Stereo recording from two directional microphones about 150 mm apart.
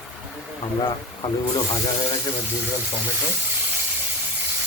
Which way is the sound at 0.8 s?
30° left (ahead or behind).